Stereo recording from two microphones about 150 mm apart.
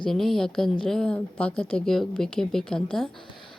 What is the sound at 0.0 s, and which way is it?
A woman's voice, centre (ahead or behind).